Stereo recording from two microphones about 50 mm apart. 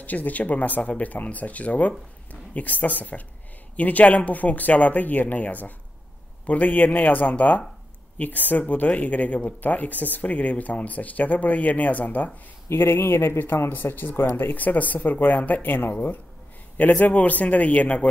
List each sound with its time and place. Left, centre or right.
0.0 s speech: left
12.6 s a man's voice: left